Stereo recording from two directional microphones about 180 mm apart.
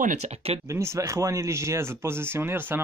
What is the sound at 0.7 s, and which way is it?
Speech, 15° right (ahead or behind).